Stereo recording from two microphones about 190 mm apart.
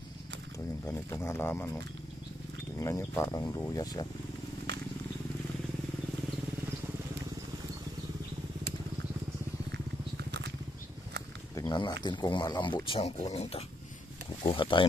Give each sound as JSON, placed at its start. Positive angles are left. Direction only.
{"t": 0.8, "sound": "speech", "side_deg": 15}
{"t": 2.8, "sound": "speech", "side_deg": 15}
{"t": 11.5, "sound": "speech", "side_deg": 20}